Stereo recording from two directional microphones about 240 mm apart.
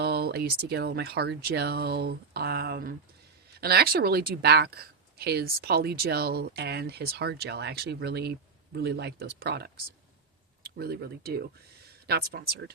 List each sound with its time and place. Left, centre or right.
0.0 s speech: right